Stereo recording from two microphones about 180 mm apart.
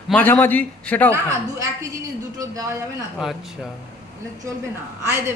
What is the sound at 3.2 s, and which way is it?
Speech, centre (ahead or behind).